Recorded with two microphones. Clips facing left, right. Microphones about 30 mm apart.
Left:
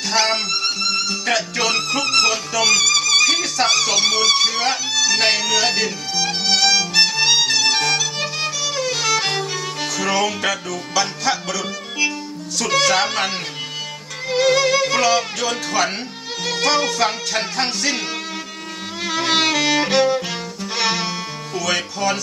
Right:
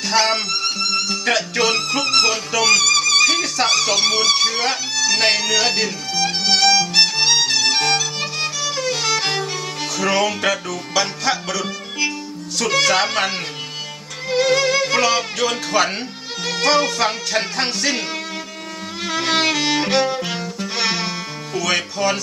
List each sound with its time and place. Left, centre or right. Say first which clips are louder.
0.1 s violin: right 1 dB; centre
1.1 s music: right 1 dB; centre
10.1 s music: right 2 dB; centre
19.0 s violin: even; centre
20.7 s music: left 1 dB; centre